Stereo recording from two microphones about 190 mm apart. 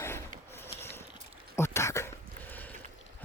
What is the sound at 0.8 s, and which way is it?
Boat, 10° left (ahead or behind).